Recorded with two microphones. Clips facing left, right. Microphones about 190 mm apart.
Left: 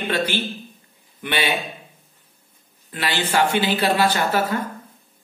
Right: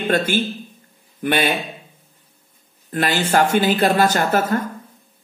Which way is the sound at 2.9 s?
45° right (ahead or behind).